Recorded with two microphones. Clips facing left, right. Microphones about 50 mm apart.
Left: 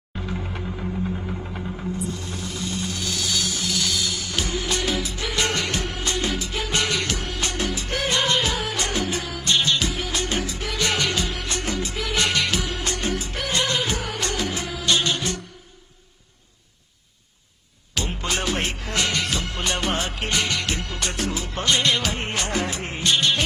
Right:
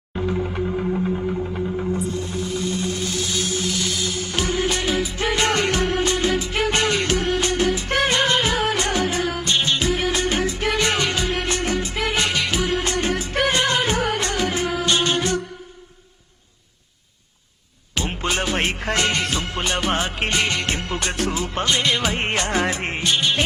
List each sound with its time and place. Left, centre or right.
0.2 s music: centre
1.9 s music: right
9.5 s music: right
9.9 s music: right
11.3 s music of bollywood: right
13.3 s music: right
18.1 s music: right
19.6 s music: centre
19.9 s music: right
21.7 s music: centre
22.4 s music: right
23.0 s music: centre